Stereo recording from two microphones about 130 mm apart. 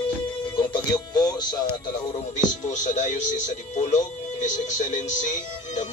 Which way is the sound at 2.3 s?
70° left (ahead or behind).